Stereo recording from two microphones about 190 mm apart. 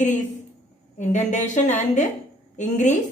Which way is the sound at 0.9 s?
40° left (ahead or behind).